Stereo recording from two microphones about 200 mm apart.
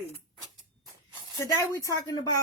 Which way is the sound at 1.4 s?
15° left (ahead or behind).